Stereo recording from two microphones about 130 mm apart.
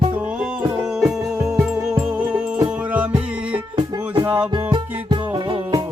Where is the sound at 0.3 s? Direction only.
5° right (ahead or behind).